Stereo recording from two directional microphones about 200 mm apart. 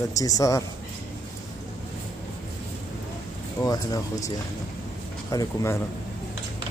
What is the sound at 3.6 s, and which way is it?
Speech, 15° left (ahead or behind).